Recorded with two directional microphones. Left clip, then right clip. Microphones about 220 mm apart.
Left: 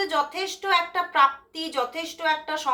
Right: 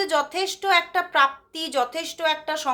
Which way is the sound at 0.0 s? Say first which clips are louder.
Right 2 dB; 45° right (ahead or behind).